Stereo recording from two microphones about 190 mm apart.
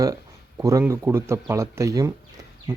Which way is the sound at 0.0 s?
15° right (ahead or behind).